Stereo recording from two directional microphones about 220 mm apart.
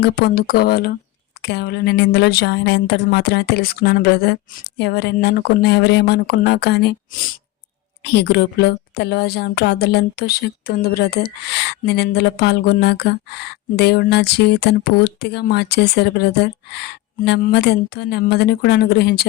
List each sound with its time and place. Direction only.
0.0 s a woman's voice: 45° left (ahead or behind)
8.0 s a woman's voice: 50° left (ahead or behind)